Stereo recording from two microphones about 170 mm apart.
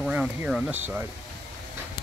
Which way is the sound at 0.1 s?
5° right (ahead or behind).